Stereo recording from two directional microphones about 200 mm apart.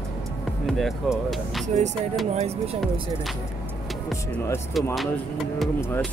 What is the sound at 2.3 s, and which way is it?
Speech, 30° right (ahead or behind).